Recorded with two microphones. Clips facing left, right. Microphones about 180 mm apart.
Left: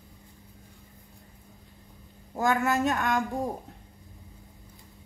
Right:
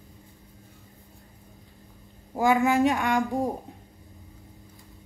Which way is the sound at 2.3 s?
10° right (ahead or behind).